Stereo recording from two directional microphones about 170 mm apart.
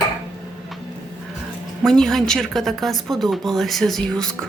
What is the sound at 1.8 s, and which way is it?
A woman's voice, 5° left (ahead or behind).